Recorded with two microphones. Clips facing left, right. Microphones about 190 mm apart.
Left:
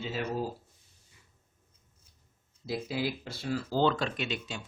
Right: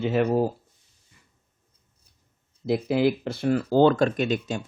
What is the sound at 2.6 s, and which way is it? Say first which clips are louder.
Speech: right 11 dB; 60° right (ahead or behind).